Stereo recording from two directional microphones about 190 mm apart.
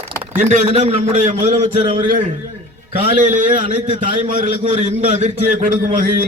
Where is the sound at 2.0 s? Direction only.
45° right (ahead or behind).